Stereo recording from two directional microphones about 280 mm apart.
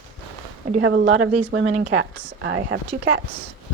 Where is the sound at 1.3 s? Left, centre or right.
Right.